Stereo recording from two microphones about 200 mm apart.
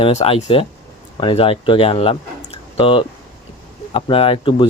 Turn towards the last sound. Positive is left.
turn(degrees=25)  # may be behind; listen again after turning